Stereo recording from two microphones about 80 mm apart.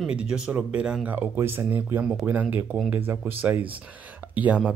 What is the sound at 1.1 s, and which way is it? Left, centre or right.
Speech, right.